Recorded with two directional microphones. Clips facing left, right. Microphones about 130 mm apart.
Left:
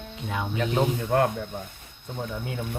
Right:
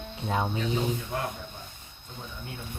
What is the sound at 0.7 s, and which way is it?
Speech, 60° left (ahead or behind).